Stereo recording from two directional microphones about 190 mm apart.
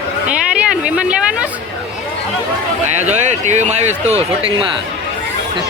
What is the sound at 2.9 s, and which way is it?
Speech, 35° right (ahead or behind).